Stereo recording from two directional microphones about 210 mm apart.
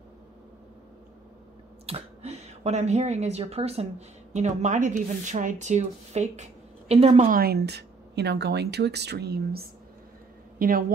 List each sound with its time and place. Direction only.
1.9 s speech: 30° right (ahead or behind)
7.2 s a woman's voice: 45° right (ahead or behind)